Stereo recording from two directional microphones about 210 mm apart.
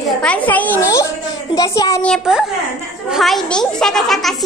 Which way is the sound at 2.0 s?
Centre (ahead or behind).